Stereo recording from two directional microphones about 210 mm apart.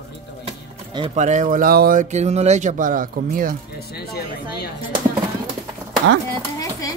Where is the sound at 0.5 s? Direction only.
25° right (ahead or behind).